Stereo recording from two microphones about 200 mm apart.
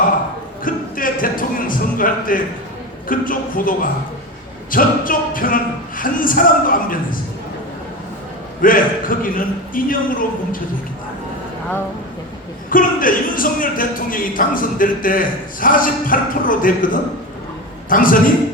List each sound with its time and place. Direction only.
0.6 s a sound: 45° left (ahead or behind)
3.1 s speech: 45° left (ahead or behind)
8.6 s speech: 45° left (ahead or behind)
12.7 s speech: 45° left (ahead or behind)